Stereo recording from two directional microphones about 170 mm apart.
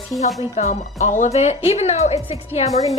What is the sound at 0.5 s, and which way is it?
A woman's voice, 40° left (ahead or behind).